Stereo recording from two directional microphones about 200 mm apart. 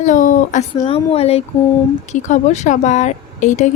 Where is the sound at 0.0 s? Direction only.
40° left (ahead or behind).